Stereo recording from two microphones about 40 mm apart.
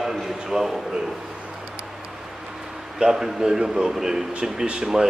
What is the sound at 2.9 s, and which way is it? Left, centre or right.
A man's voice, centre.